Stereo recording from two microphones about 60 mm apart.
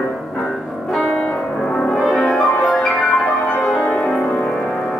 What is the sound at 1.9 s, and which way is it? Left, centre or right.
Music, centre.